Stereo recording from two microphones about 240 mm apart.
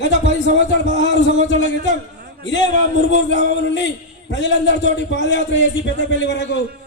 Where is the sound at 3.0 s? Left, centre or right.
Left.